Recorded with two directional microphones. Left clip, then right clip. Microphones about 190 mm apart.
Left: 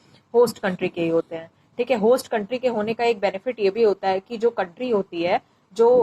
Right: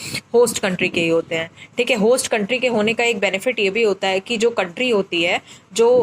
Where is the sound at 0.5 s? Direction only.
15° right (ahead or behind).